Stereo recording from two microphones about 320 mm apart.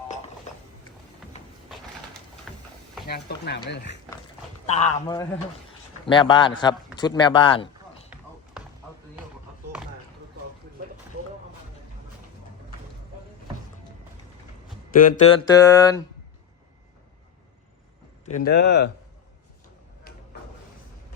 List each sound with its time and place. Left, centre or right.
2.5 s a sound: centre
3.1 s speech: left
4.9 s speech: centre
8.1 s basketball bounce: centre
14.9 s music: left
15.4 s speech: centre
18.3 s speech: left